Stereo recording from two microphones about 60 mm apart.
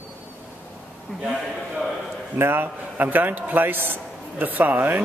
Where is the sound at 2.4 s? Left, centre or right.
Right.